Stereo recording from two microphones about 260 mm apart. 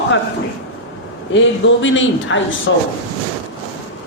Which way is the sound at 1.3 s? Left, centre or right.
Left.